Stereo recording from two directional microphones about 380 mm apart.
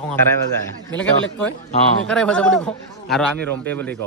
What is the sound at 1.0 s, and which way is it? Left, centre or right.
Speech, centre.